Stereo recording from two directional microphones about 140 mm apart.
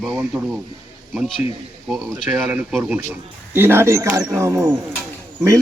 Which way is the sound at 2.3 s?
10° right (ahead or behind).